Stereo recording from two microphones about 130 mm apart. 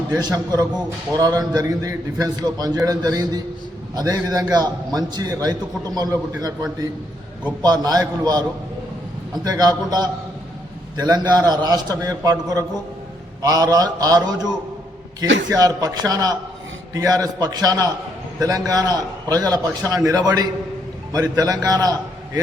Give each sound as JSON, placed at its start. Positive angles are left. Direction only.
{"t": 0.1, "sound": "a man's voice", "side_deg": -30}
{"t": 7.6, "sound": "a man's voice", "side_deg": -30}